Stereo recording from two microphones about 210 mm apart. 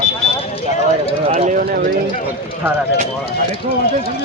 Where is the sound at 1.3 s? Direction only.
35° right (ahead or behind).